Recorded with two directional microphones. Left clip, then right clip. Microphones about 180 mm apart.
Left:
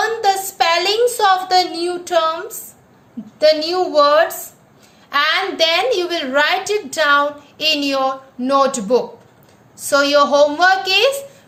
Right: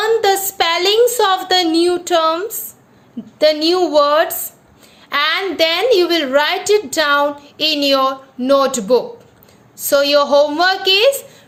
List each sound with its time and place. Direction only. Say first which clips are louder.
0.0 s a sound: right 2 dB; 45° right (ahead or behind)
1.9 s a woman's voice: right 3 dB; 40° right (ahead or behind)
3.4 s a woman's voice: right 1 dB; 45° right (ahead or behind)